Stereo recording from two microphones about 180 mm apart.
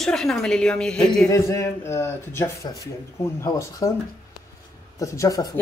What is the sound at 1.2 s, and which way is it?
Speech, 15° left (ahead or behind).